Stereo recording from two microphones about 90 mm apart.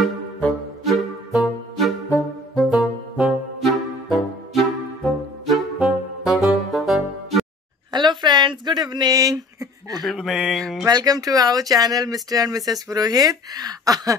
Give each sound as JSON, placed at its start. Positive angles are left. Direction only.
{"t": 0.8, "sound": "music", "side_deg": 0}
{"t": 2.8, "sound": "brass instrument", "side_deg": -10}
{"t": 3.6, "sound": "music", "side_deg": 0}
{"t": 7.9, "sound": "a sound", "side_deg": -55}
{"t": 10.0, "sound": "a sound", "side_deg": -5}
{"t": 10.9, "sound": "speech", "side_deg": -45}